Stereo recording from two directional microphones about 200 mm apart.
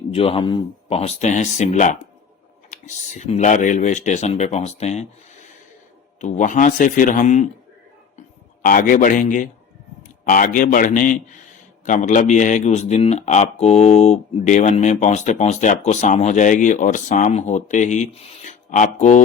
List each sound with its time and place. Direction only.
0.1 s speech: 30° left (ahead or behind)
6.1 s speech: 35° left (ahead or behind)
8.6 s a man's voice: 45° left (ahead or behind)